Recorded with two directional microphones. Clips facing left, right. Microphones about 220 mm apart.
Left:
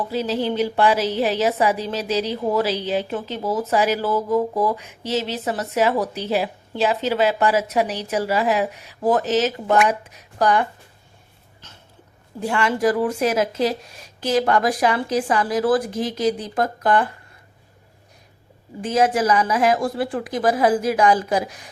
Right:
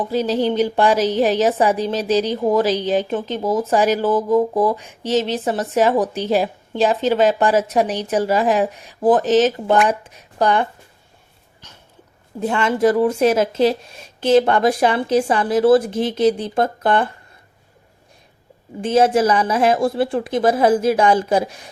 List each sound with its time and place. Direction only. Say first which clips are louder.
0.1 s speech: right 5 dB; 5° left (ahead or behind)
1.2 s a woman's voice: right 3 dB; 35° right (ahead or behind)
12.4 s speech: right 3 dB; 20° right (ahead or behind)
18.8 s speech: right 4 dB; 30° right (ahead or behind)